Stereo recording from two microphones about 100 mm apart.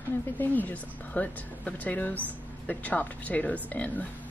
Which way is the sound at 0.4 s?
15° left (ahead or behind).